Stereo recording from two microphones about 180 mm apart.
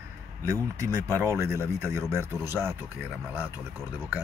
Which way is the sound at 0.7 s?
15° right (ahead or behind).